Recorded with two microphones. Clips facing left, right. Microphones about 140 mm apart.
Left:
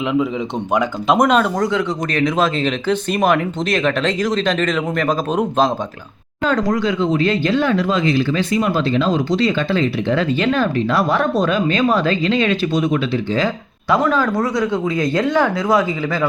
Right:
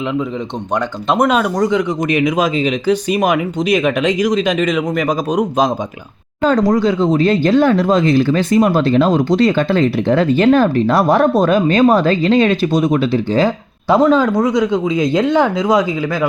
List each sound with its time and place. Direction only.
0.7 s speech: centre (ahead or behind)
6.4 s speech: 35° right (ahead or behind)
13.9 s speech: 25° right (ahead or behind)